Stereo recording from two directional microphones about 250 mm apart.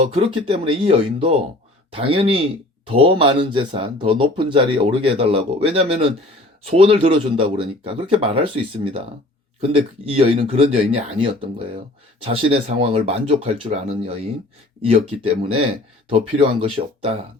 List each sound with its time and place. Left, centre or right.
0.1 s speech: right